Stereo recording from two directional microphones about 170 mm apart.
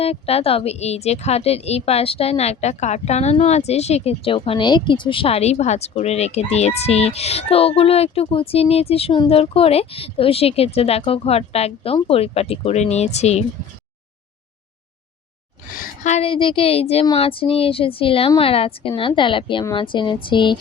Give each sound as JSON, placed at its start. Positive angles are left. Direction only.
{"t": 0.0, "sound": "a woman's voice", "side_deg": 35}
{"t": 15.7, "sound": "a woman's voice", "side_deg": 50}
{"t": 19.7, "sound": "a sound", "side_deg": 30}